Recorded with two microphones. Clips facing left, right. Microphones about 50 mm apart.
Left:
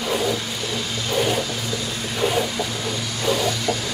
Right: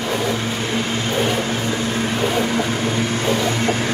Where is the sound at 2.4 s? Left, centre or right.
Right.